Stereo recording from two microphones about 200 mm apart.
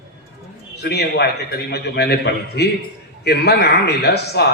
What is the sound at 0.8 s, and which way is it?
A man's voice, 55° left (ahead or behind).